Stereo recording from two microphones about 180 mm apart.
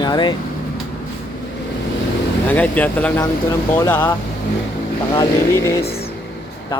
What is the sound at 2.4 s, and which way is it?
Speech, 10° left (ahead or behind).